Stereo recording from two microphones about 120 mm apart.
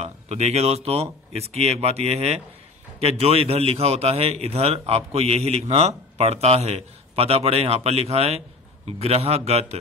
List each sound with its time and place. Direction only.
0.0 s a man's voice: 60° right (ahead or behind)